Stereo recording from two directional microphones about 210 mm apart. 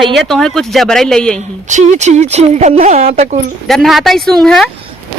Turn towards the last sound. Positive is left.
turn(degrees=0)  # may be behind; listen again after turning